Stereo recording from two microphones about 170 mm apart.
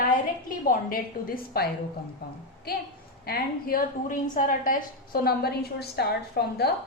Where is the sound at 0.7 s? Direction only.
55° left (ahead or behind).